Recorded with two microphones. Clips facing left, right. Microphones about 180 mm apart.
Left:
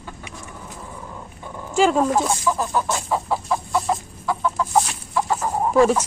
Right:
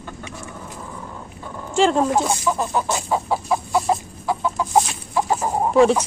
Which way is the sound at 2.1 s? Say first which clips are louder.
Even; 10° right (ahead or behind).